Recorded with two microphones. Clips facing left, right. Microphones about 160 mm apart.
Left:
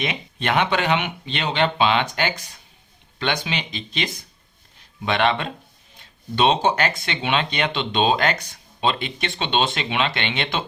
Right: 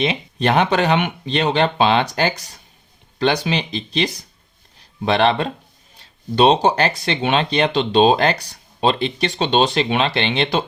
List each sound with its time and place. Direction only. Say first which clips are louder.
0.0 s speech: right 7 dB; 35° right (ahead or behind)